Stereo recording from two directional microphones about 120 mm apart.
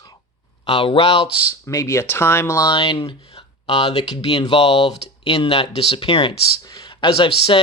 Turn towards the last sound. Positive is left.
turn(degrees=40)  # may be behind; listen again after turning